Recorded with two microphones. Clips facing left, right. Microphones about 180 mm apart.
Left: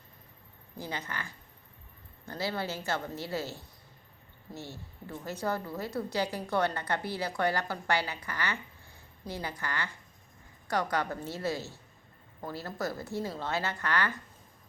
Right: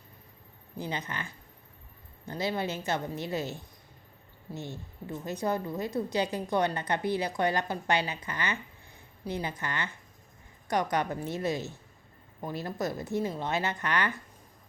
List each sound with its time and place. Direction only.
0.8 s a woman's voice: 20° right (ahead or behind)